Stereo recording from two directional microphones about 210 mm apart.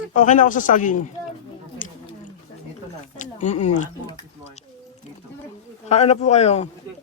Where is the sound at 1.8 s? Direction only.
40° left (ahead or behind).